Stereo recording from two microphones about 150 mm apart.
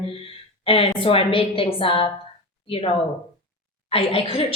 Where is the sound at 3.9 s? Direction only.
40° left (ahead or behind).